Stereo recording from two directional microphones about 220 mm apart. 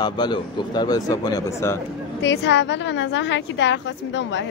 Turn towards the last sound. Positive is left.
turn(degrees=55)  # may be behind; listen again after turning